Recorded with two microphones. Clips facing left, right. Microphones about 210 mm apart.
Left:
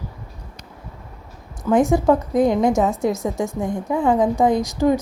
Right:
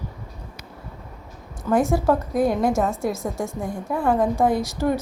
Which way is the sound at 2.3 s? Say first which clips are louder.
Left 3 dB; 20° left (ahead or behind).